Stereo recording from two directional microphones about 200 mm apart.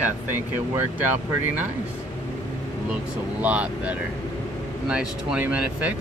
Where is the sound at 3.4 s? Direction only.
5° right (ahead or behind).